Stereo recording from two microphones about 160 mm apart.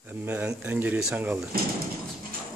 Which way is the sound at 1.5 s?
65° right (ahead or behind).